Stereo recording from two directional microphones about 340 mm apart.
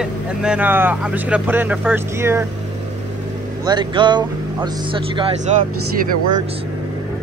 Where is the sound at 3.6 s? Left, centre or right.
Centre.